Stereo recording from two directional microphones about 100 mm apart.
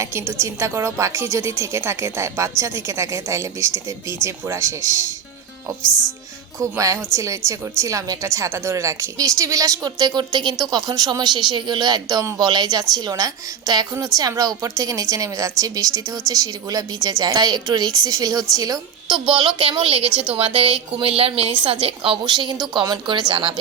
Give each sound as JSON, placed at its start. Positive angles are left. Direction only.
{"t": 0.0, "sound": "a woman's voice", "side_deg": -25}
{"t": 6.6, "sound": "a woman's voice", "side_deg": -35}
{"t": 22.2, "sound": "a woman's voice", "side_deg": -45}